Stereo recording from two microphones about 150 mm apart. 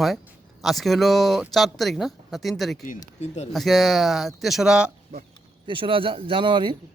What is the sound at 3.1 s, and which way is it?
Speech, 45° left (ahead or behind).